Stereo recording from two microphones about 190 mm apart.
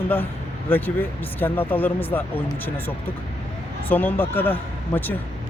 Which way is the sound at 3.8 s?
10° left (ahead or behind).